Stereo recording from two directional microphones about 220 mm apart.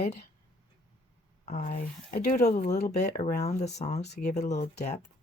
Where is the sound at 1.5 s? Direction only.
35° left (ahead or behind).